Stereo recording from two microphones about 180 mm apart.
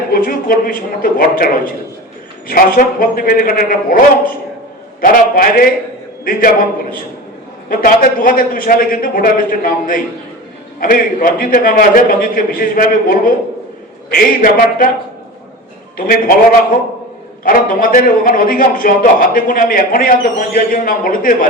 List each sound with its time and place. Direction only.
0.1 s a man's voice: 50° left (ahead or behind)
2.5 s a man's voice: 55° left (ahead or behind)
7.7 s a man's voice: 50° left (ahead or behind)
16.0 s a man's voice: 55° left (ahead or behind)